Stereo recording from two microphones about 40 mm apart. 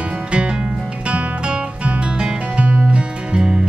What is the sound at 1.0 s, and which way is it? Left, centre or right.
Music, right.